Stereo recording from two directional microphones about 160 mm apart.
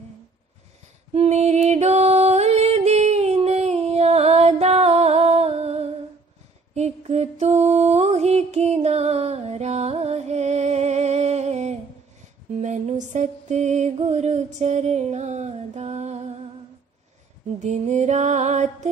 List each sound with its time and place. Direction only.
1.1 s music: 40° right (ahead or behind)
17.6 s music: 45° right (ahead or behind)